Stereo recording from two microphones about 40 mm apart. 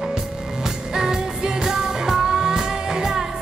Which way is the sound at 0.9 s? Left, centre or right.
Centre.